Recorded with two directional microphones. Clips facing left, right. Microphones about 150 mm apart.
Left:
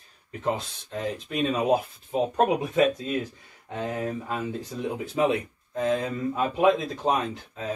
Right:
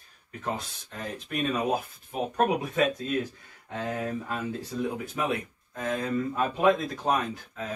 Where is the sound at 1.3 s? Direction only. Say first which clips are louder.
Left 4 dB; 20° left (ahead or behind).